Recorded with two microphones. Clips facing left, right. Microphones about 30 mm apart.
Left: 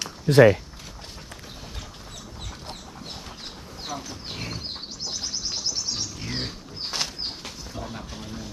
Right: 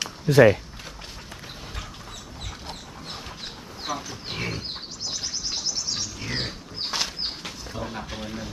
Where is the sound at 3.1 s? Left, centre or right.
Centre.